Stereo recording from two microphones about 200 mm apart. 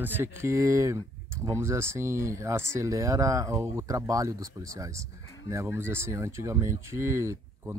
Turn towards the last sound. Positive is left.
turn(degrees=-15)  # may be behind; listen again after turning